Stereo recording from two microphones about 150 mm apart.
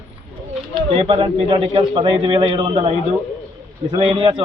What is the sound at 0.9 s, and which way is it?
A man's voice, 40° right (ahead or behind).